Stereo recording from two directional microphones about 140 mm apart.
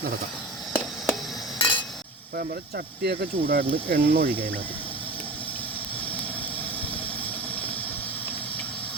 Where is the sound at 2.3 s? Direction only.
90° right.